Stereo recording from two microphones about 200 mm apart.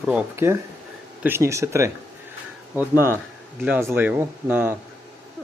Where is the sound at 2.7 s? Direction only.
15° left (ahead or behind).